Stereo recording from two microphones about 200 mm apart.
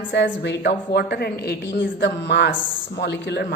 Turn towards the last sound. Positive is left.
turn(degrees=55)  # may be behind; listen again after turning